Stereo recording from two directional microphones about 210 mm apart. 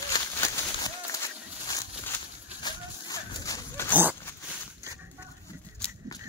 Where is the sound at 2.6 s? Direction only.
15° left (ahead or behind).